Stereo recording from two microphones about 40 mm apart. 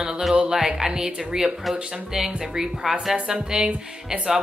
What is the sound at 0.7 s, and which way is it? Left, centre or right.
A woman's voice, centre.